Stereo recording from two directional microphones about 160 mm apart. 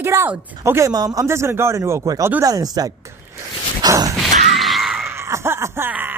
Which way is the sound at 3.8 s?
20° right (ahead or behind).